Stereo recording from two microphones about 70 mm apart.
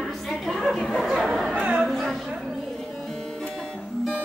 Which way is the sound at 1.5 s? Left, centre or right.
Centre.